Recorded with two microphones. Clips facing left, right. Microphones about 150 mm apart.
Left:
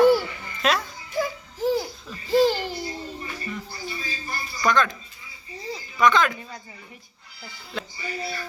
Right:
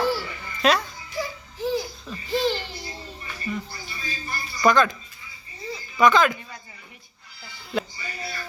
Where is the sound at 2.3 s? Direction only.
40° left (ahead or behind).